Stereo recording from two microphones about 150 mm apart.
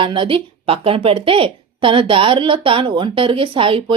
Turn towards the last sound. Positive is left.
turn(degrees=-35)  # may be behind; listen again after turning